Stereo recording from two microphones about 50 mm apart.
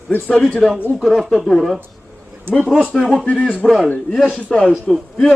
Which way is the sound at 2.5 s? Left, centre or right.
Right.